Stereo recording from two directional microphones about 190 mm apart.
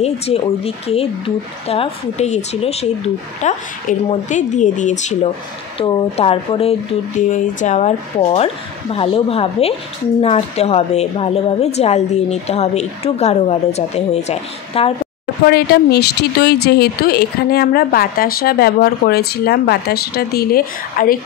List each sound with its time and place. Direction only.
0.0 s a woman's voice: 30° left (ahead or behind)
15.4 s speech: 55° left (ahead or behind)